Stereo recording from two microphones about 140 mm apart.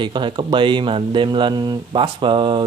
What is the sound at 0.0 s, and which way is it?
Speech, 35° right (ahead or behind).